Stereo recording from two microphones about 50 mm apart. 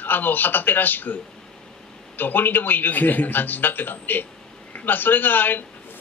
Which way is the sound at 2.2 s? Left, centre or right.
Left.